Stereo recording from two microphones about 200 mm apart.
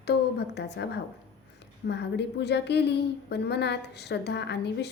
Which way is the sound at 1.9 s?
55° left (ahead or behind).